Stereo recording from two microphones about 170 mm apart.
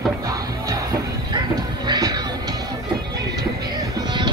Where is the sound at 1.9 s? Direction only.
25° right (ahead or behind).